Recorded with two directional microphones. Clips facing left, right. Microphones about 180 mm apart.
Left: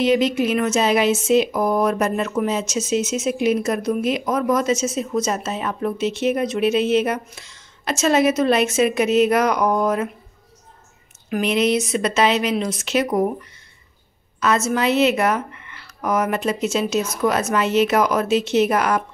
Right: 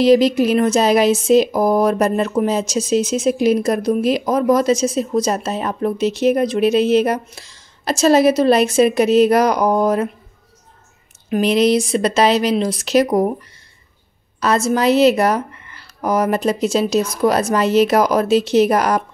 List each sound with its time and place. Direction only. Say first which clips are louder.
0.0 s speech: right 5 dB; 35° right (ahead or behind)
11.2 s speech: right 4 dB; 30° right (ahead or behind)
14.4 s speech: right 3 dB; 35° right (ahead or behind)